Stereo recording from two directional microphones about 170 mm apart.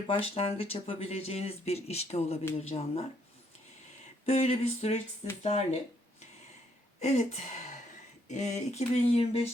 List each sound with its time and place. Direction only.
0.1 s speech: 35° left (ahead or behind)
4.3 s speech: 40° left (ahead or behind)
7.0 s speech: 40° left (ahead or behind)